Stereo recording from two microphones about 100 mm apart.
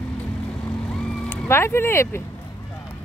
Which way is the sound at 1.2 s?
25° left (ahead or behind).